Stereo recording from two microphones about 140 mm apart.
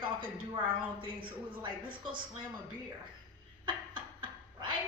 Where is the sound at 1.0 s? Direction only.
35° right (ahead or behind).